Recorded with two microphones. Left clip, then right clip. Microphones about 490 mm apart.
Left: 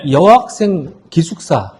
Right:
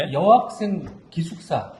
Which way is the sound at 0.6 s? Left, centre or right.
Left.